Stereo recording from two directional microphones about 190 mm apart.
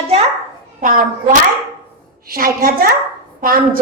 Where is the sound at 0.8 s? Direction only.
45° right (ahead or behind).